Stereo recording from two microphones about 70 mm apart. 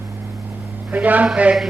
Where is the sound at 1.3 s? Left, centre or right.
Centre.